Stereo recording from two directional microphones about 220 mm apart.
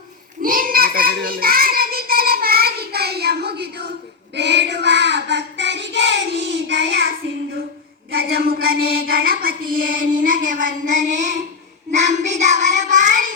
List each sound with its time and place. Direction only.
0.4 s child singing: 40° right (ahead or behind)
8.1 s child singing: 45° right (ahead or behind)